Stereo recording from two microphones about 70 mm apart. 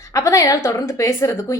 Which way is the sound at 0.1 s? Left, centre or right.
Left.